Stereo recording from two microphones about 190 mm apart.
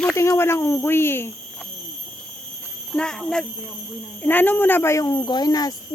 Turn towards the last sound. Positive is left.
turn(degrees=20)  # may be behind; listen again after turning